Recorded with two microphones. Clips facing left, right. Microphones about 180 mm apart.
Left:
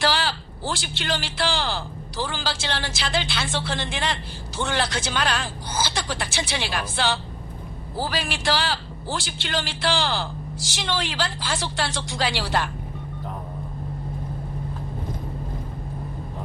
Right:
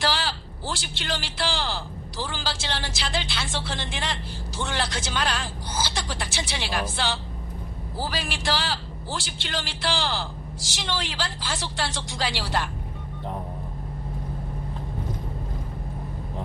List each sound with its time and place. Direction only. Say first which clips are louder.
0.0 s a man's voice: left 3 dB; 65° left (ahead or behind)